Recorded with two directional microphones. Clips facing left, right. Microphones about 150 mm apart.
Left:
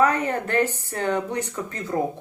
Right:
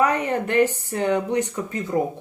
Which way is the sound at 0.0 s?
15° right (ahead or behind).